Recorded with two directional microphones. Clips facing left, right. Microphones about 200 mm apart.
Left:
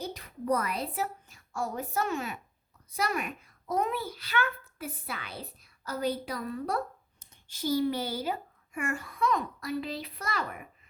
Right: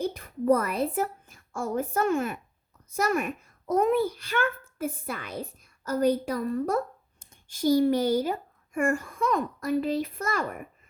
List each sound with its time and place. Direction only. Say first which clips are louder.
0.0 s a woman's voice: right 8 dB; 50° right (ahead or behind)